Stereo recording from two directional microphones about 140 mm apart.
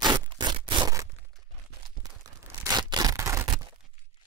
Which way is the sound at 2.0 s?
25° right (ahead or behind).